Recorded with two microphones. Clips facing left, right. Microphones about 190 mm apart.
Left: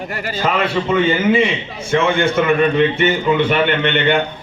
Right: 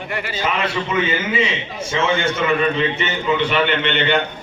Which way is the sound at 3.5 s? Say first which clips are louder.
Left 3 dB; 50° left (ahead or behind).